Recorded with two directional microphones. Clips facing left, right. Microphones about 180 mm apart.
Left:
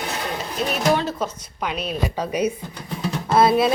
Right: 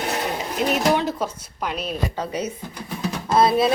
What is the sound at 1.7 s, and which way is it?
A woman's voice, 5° left (ahead or behind).